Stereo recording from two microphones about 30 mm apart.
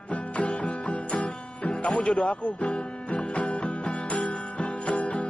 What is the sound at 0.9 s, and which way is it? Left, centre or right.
Music, left.